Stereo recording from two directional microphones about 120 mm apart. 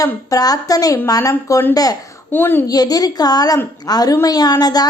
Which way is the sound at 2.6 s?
30° left (ahead or behind).